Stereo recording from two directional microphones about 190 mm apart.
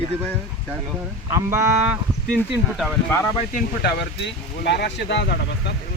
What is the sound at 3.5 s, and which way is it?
Speech, 55° left (ahead or behind).